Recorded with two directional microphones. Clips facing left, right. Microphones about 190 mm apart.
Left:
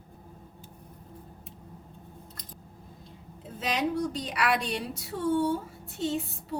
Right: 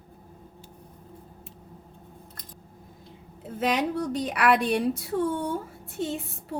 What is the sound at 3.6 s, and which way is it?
A woman's voice, 60° right (ahead or behind).